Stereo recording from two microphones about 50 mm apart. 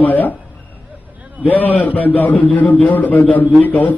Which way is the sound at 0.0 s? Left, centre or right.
Left.